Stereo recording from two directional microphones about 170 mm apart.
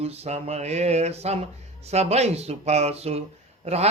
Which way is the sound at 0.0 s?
40° right (ahead or behind).